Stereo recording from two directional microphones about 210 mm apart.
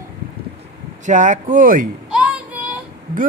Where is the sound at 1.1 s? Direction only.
35° right (ahead or behind).